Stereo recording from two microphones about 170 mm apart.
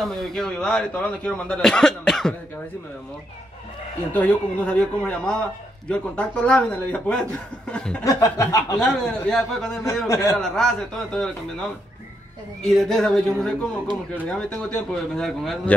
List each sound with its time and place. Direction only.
0.0 s speech: centre (ahead or behind)
4.1 s speech: 10° left (ahead or behind)
8.0 s chuckle: 20° left (ahead or behind)
8.7 s speech: 5° left (ahead or behind)
10.0 s speech: 15° left (ahead or behind)
10.3 s speech: 5° left (ahead or behind)